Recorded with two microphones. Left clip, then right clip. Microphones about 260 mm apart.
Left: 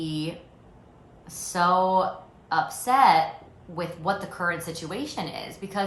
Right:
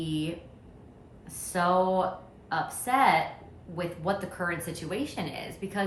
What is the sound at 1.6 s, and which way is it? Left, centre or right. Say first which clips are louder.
Speech: left 4 dB; centre.